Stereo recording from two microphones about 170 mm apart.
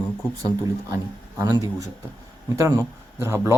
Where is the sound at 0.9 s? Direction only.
20° right (ahead or behind).